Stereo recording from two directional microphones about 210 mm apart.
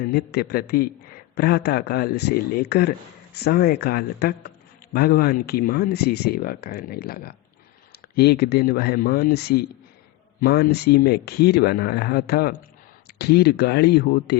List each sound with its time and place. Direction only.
0.0 s a man's voice: 45° left (ahead or behind)